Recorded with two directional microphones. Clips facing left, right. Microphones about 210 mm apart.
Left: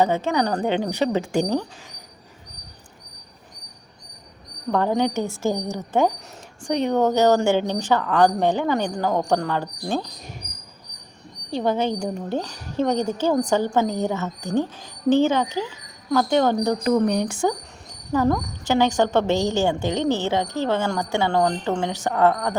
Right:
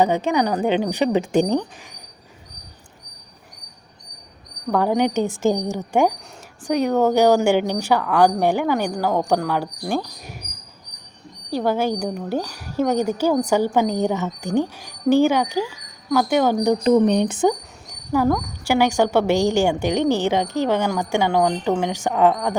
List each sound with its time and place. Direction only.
0.0 s a woman's voice: 15° right (ahead or behind)
4.7 s a woman's voice: 10° right (ahead or behind)
11.5 s a woman's voice: 5° right (ahead or behind)
16.8 s a woman's voice: 20° right (ahead or behind)
18.1 s a woman's voice: 10° right (ahead or behind)